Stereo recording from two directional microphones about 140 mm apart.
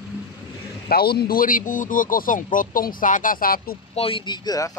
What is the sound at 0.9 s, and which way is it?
Speech, 90° left.